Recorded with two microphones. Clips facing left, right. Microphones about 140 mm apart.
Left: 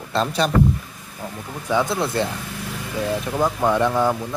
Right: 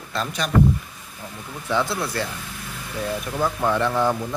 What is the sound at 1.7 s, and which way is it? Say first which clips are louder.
Speech: left 3 dB; 15° left (ahead or behind).